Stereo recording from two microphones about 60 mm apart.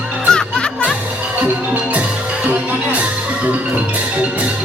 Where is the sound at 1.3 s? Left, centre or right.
Right.